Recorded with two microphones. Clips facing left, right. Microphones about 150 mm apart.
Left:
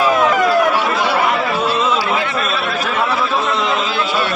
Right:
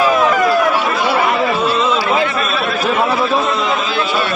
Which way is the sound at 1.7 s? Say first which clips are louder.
Right 1 dB; 5° left (ahead or behind).